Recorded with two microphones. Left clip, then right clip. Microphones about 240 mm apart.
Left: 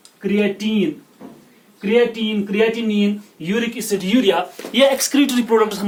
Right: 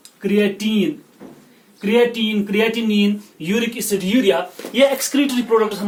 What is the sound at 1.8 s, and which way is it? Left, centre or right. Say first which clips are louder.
Speech: even; centre.